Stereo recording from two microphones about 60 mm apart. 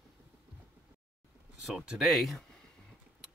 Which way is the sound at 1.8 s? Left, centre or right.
Centre.